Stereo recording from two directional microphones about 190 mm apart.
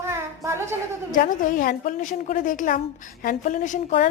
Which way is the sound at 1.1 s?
45° left (ahead or behind).